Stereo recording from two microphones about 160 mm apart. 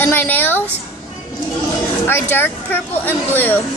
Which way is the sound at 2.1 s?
15° left (ahead or behind).